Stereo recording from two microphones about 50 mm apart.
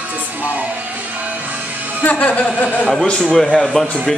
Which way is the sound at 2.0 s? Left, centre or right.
Left.